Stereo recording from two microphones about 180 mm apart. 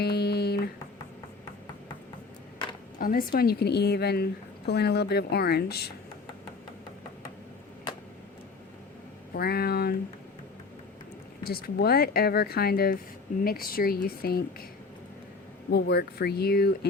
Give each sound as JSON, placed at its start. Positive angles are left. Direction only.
{"t": 0.0, "sound": "a sound", "side_deg": 65}
{"t": 3.0, "sound": "a woman's voice", "side_deg": 55}
{"t": 9.3, "sound": "a woman's voice", "side_deg": 55}
{"t": 11.4, "sound": "a woman's voice", "side_deg": 60}
{"t": 15.7, "sound": "a woman's voice", "side_deg": 60}